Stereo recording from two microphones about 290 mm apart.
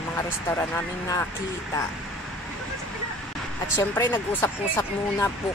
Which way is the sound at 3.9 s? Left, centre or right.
Centre.